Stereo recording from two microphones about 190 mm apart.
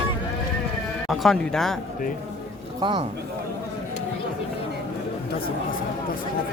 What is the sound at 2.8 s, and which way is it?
Speech, 25° right (ahead or behind).